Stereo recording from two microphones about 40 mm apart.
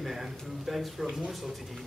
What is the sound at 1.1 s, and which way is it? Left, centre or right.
Speech, centre.